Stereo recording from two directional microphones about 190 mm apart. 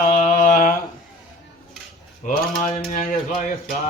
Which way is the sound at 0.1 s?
40° left (ahead or behind).